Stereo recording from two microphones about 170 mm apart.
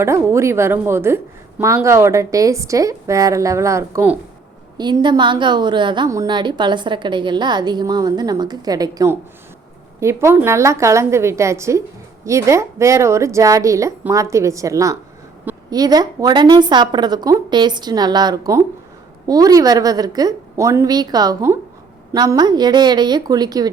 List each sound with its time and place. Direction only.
0.0 s a woman's voice: 15° right (ahead or behind)
4.8 s a woman's voice: 25° right (ahead or behind)